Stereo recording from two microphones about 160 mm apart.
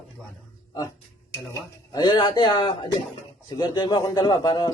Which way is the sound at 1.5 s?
25° left (ahead or behind).